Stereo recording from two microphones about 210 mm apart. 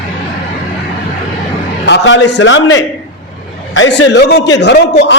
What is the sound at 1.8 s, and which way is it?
A man's voice, 60° left (ahead or behind).